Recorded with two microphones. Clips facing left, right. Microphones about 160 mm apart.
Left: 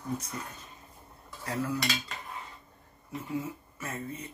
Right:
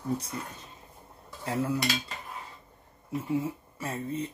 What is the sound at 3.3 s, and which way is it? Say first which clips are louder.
Speech: right 5 dB; 30° right (ahead or behind).